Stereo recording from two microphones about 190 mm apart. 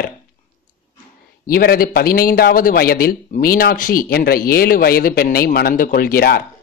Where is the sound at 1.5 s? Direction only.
50° left (ahead or behind).